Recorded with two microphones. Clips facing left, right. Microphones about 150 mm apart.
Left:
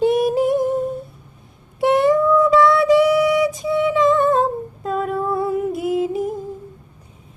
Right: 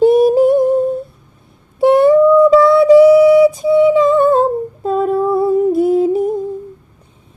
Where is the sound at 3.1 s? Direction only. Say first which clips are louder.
Right 9 dB; 30° right (ahead or behind).